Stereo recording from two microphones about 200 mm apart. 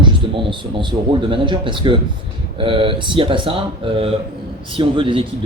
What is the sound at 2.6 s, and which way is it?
Speech, 25° right (ahead or behind).